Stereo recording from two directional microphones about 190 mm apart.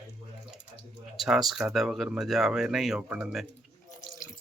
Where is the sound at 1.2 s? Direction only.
Centre (ahead or behind).